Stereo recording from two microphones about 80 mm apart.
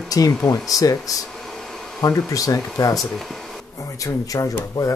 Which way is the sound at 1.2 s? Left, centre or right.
Centre.